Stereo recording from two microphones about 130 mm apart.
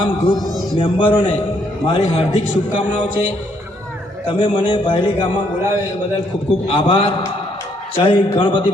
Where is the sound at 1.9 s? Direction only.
55° left (ahead or behind).